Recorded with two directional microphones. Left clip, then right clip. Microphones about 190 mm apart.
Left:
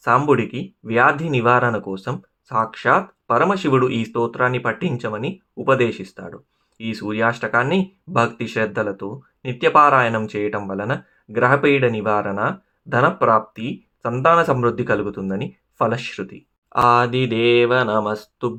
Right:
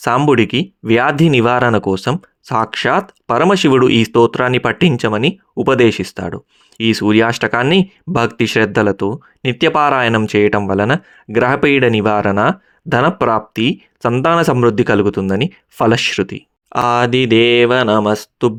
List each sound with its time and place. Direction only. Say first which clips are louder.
0.0 s speech: right 4 dB; 50° right (ahead or behind)